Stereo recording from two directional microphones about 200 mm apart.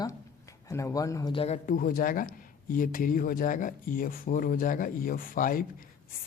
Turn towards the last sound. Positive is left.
turn(degrees=45)  # may be behind; listen again after turning